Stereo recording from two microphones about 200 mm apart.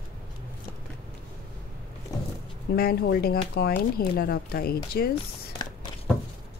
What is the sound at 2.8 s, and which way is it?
Speech, 50° left (ahead or behind).